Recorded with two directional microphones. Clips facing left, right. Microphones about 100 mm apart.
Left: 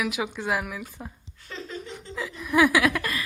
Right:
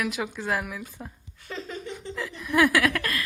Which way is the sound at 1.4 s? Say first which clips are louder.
Right 1 dB; 15° right (ahead or behind).